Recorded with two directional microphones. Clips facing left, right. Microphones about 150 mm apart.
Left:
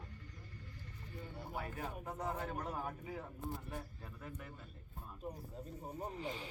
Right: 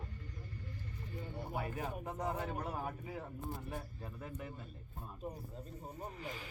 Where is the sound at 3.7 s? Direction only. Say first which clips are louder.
Right 3 dB; 20° right (ahead or behind).